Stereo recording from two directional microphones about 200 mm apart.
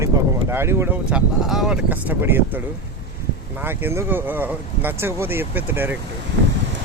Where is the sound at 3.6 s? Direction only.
10° right (ahead or behind).